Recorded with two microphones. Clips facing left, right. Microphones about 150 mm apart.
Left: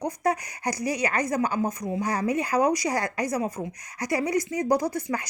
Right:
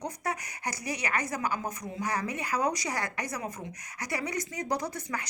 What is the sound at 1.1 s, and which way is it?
A woman's voice, 35° left (ahead or behind).